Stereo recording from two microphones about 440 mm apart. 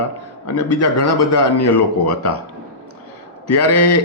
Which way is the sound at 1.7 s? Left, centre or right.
Left.